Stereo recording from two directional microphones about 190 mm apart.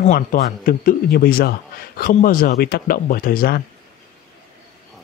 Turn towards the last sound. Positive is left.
turn(degrees=50)  # may be behind; listen again after turning